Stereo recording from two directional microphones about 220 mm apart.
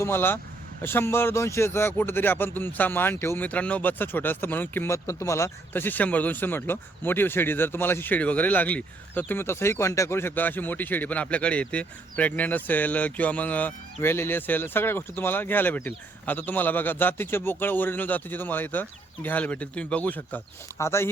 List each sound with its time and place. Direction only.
0.0 s speech: 10° left (ahead or behind)